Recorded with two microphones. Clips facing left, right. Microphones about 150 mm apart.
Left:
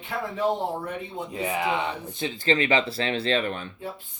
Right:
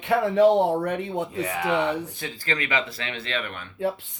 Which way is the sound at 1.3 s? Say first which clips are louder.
Left 4 dB; 20° left (ahead or behind).